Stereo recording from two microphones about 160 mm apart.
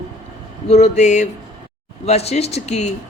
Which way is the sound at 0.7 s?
45° left (ahead or behind).